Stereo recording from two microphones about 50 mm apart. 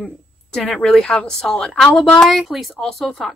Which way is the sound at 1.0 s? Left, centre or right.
Left.